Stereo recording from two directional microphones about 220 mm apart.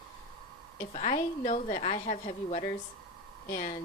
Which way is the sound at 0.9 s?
35° left (ahead or behind).